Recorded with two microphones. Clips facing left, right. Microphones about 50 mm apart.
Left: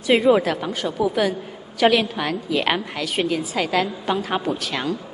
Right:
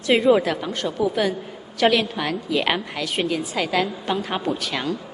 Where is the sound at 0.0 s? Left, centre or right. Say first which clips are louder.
Left 1 dB; centre.